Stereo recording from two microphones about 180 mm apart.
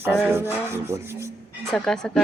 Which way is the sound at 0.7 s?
15° right (ahead or behind).